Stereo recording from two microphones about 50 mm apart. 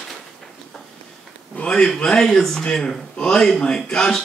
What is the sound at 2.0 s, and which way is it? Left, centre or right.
Speech, centre.